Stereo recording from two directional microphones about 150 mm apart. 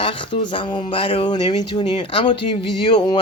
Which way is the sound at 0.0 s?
35° left (ahead or behind).